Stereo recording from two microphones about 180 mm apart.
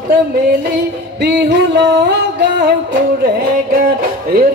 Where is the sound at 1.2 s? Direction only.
70° right (ahead or behind).